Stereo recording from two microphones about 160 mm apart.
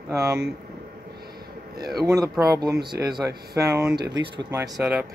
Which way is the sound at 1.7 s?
75° right (ahead or behind).